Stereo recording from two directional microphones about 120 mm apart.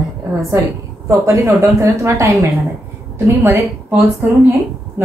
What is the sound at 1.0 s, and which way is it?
Speech, 25° right (ahead or behind).